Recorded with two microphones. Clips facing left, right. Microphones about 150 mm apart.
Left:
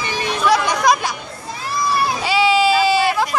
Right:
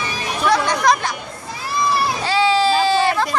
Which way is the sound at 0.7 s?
15° left (ahead or behind).